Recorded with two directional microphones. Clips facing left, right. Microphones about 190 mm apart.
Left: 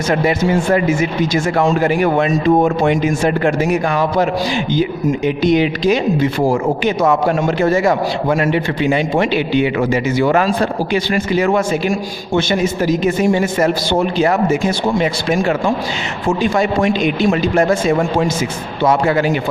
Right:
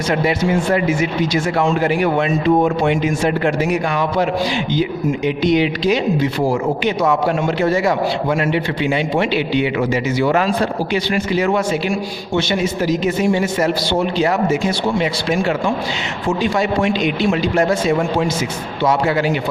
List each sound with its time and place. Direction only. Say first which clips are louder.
0.1 s speech: left 2 dB; 45° left (ahead or behind)